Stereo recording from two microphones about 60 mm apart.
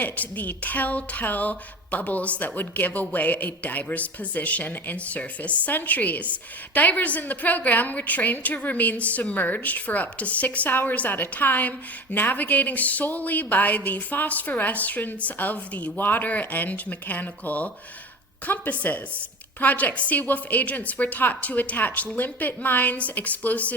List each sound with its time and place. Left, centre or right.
0.0 s speech: left